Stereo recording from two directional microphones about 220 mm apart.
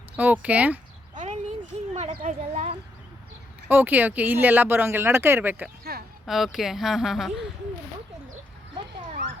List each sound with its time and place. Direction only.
0.2 s speech: 5° right (ahead or behind)
1.1 s a sound: 35° right (ahead or behind)
1.9 s speech: 30° right (ahead or behind)
3.7 s speech: 10° right (ahead or behind)